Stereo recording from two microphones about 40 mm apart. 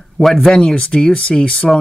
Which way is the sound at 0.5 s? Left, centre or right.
Left.